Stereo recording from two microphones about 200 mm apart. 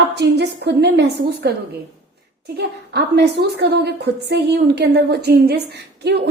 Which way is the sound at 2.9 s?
55° right (ahead or behind).